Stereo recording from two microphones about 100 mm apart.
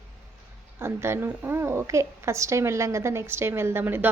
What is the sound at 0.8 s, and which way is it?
A woman's voice, 25° right (ahead or behind).